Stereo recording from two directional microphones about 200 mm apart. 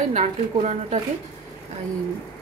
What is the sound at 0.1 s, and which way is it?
Speech, 35° right (ahead or behind).